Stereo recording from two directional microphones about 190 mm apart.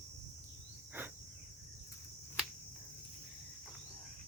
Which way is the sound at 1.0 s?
10° right (ahead or behind).